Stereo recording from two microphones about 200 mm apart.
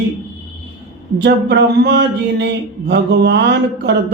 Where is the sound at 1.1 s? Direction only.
55° right (ahead or behind).